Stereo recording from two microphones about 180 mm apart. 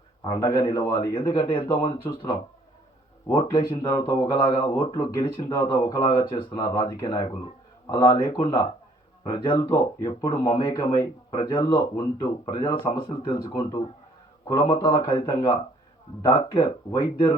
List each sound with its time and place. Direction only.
0.3 s a man's voice: 20° left (ahead or behind)